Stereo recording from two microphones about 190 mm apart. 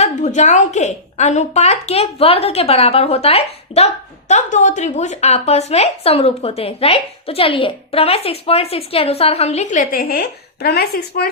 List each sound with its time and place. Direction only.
0.0 s speech: 40° left (ahead or behind); by 11.3 s 55° left (ahead or behind)